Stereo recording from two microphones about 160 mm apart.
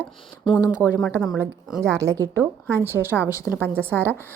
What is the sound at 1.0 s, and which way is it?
Speech, centre (ahead or behind).